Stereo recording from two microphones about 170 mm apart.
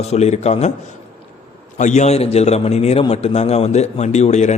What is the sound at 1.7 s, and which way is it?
A man's voice, 45° left (ahead or behind).